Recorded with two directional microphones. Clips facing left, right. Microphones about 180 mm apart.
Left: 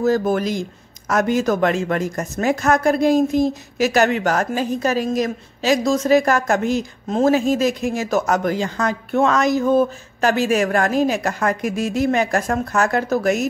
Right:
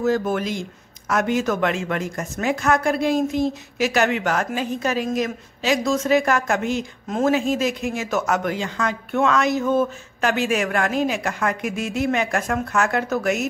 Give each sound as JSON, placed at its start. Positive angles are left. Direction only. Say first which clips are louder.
{"t": 0.0, "sound": "speech", "louder": "left 3 dB", "side_deg": 40}